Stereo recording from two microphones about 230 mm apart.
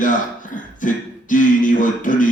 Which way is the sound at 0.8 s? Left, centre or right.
Left.